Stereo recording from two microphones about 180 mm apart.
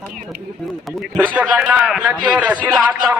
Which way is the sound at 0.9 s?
5° right (ahead or behind).